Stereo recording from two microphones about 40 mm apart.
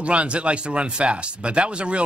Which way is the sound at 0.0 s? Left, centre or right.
Right.